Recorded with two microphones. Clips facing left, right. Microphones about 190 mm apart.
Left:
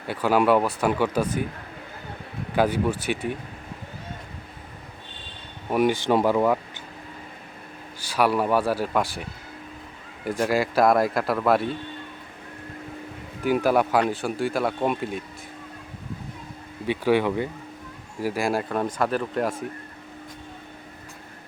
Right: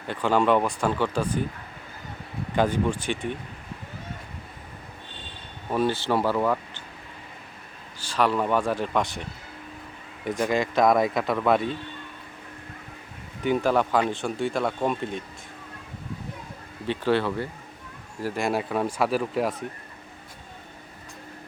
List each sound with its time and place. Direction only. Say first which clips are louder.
0.1 s speech: left 2 dB; 10° left (ahead or behind)
2.6 s speech: left 1 dB; 10° left (ahead or behind)
5.7 s speech: left 3 dB; 15° left (ahead or behind)
8.0 s speech: left 2 dB; 10° left (ahead or behind)
10.2 s speech: left 1 dB; 5° left (ahead or behind)
13.4 s speech: left 2 dB; 5° left (ahead or behind)
16.8 s speech: left 2 dB; 10° left (ahead or behind)